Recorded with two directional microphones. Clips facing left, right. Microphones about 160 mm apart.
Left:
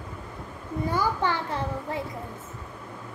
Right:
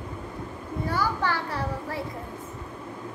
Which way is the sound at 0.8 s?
20° left (ahead or behind).